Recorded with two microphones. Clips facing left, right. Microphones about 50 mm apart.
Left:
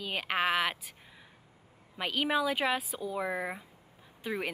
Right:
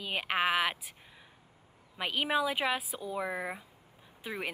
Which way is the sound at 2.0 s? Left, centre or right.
Centre.